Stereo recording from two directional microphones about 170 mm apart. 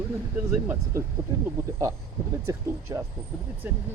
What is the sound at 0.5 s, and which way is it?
Speech, 15° right (ahead or behind).